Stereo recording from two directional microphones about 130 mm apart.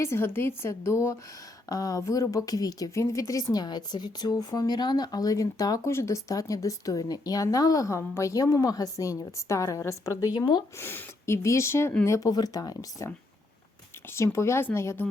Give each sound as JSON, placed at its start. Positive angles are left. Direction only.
{"t": 0.0, "sound": "speech", "side_deg": 20}
{"t": 10.8, "sound": "speech", "side_deg": 20}
{"t": 14.1, "sound": "speech", "side_deg": 20}